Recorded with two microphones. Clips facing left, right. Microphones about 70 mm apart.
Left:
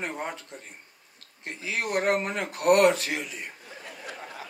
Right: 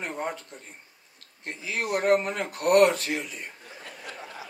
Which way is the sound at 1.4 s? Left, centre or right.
Right.